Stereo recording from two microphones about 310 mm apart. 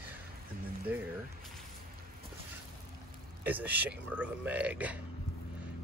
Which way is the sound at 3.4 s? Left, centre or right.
Centre.